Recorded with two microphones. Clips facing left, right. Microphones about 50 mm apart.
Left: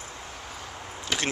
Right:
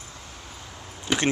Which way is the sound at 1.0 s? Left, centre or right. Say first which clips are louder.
Right 5 dB; centre.